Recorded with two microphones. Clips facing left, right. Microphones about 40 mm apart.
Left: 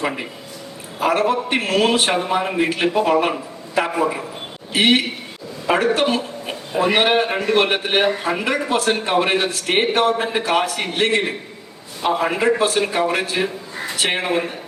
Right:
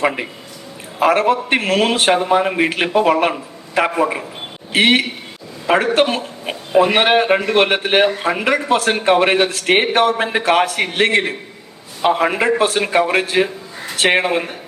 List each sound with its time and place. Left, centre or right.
0.9 s a man's voice: right
4.7 s a man's voice: right